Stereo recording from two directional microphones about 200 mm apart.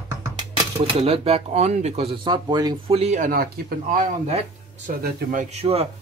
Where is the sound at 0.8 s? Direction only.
30° right (ahead or behind).